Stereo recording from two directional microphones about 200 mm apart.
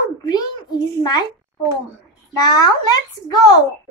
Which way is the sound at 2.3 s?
20° left (ahead or behind).